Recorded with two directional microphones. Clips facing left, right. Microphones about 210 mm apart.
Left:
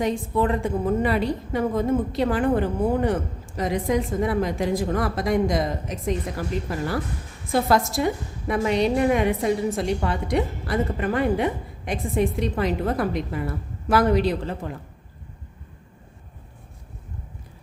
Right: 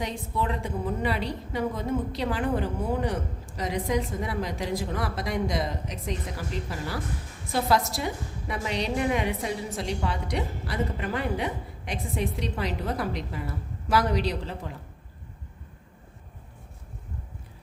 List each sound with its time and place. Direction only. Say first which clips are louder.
0.0 s a woman's voice: left 8 dB; 50° left (ahead or behind)